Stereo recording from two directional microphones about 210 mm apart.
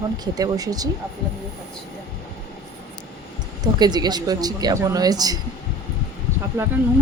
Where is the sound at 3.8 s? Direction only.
20° right (ahead or behind).